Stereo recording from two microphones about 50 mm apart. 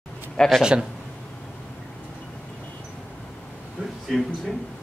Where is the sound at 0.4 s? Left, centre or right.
Centre.